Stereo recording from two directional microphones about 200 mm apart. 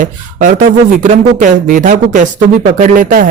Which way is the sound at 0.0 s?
40° right (ahead or behind).